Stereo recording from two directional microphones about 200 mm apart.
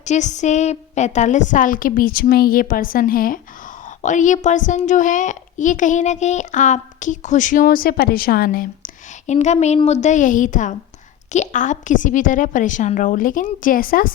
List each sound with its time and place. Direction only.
0.0 s a child's voice: 35° left (ahead or behind)